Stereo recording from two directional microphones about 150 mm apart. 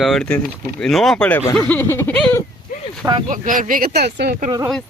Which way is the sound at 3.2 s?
60° right (ahead or behind).